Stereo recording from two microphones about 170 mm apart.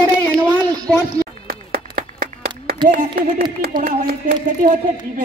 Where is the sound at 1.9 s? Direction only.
60° right (ahead or behind).